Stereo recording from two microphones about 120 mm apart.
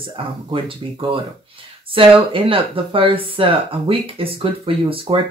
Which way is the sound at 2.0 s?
50° right (ahead or behind).